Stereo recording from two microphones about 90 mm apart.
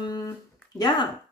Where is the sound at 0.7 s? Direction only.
55° left (ahead or behind).